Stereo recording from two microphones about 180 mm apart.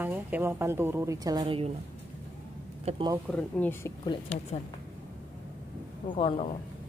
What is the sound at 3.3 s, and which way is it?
Speech, 10° left (ahead or behind).